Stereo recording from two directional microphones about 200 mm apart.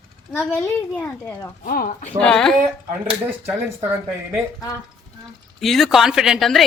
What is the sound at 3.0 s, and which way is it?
Speech, 10° right (ahead or behind).